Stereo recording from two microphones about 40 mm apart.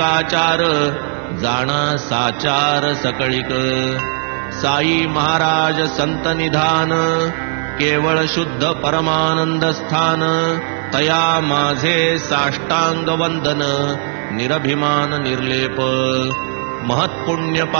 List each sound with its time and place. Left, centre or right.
0.0 s mantra: centre
16.9 s music: centre